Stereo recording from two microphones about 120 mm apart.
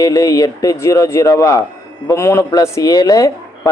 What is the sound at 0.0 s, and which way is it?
Speech, 30° left (ahead or behind).